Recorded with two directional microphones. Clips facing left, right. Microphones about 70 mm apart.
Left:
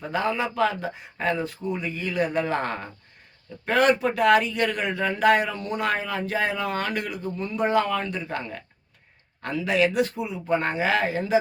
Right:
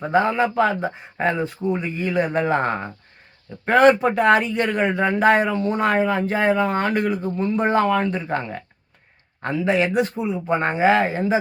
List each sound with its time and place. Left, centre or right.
0.0 s a man's voice: right